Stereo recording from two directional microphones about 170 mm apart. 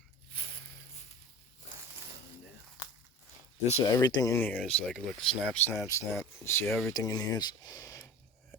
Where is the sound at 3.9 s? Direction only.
25° left (ahead or behind).